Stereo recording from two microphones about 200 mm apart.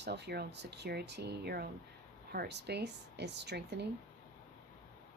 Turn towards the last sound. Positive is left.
turn(degrees=-55)  # may be behind; listen again after turning